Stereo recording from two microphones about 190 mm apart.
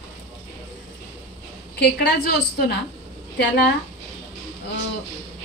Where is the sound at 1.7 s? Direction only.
60° left (ahead or behind).